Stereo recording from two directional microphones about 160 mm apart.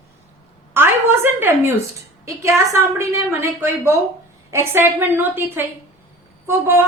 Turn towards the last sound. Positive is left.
turn(degrees=-15)  # may be behind; listen again after turning